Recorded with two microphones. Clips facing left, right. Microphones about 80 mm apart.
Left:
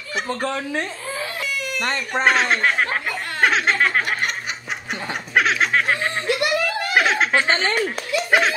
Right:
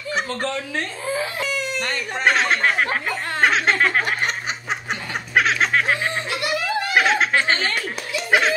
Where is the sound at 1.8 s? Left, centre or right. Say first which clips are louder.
Left 3 dB; left.